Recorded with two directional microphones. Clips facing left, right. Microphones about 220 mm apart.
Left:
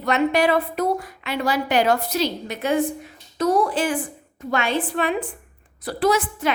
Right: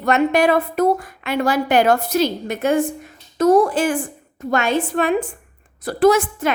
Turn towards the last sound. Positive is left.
turn(degrees=-50)  # may be behind; listen again after turning